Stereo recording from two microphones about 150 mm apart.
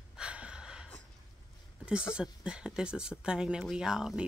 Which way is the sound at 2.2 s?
5° right (ahead or behind).